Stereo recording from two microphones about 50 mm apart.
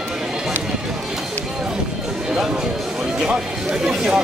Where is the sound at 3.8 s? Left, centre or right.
Centre.